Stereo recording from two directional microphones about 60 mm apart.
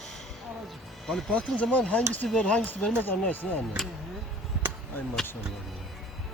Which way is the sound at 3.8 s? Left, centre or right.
Centre.